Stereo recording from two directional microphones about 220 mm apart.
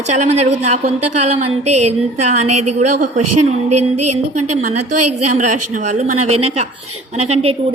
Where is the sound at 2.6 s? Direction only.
30° right (ahead or behind).